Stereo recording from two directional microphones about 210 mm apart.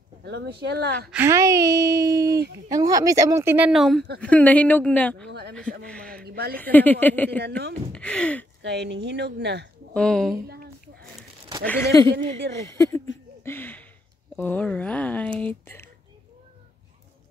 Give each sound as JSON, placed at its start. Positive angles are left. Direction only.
{"t": 0.2, "sound": "speech", "side_deg": -55}
{"t": 1.1, "sound": "speech", "side_deg": -15}
{"t": 5.9, "sound": "a sound", "side_deg": 5}
{"t": 6.2, "sound": "a sound", "side_deg": -50}
{"t": 6.5, "sound": "speech", "side_deg": 10}
{"t": 8.6, "sound": "a woman's voice", "side_deg": -55}
{"t": 9.9, "sound": "speech", "side_deg": 5}
{"t": 11.6, "sound": "speech", "side_deg": 10}
{"t": 13.4, "sound": "a sound", "side_deg": 10}
{"t": 14.3, "sound": "speech", "side_deg": 5}